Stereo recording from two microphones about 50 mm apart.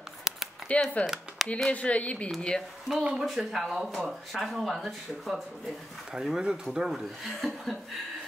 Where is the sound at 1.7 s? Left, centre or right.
Left.